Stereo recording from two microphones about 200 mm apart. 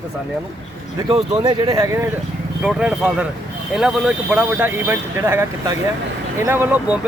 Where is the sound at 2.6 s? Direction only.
5° right (ahead or behind).